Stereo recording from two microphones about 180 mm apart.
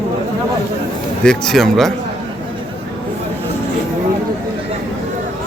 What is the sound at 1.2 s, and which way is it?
Speech, 5° left (ahead or behind).